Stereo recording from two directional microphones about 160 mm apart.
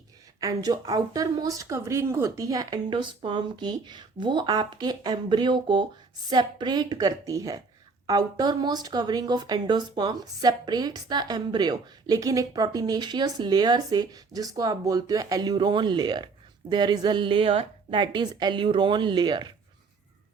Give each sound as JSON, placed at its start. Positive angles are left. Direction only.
{"t": 0.3, "sound": "a woman's voice", "side_deg": -20}